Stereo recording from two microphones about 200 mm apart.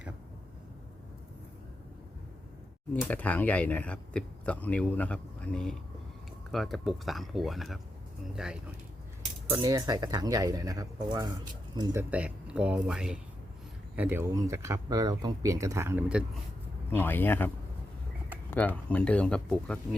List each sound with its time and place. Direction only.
2.9 s speech: 10° left (ahead or behind)
9.5 s speech: 15° right (ahead or behind)
12.1 s speech: 5° right (ahead or behind)
16.9 s speech: 10° left (ahead or behind)
18.5 s speech: 10° left (ahead or behind)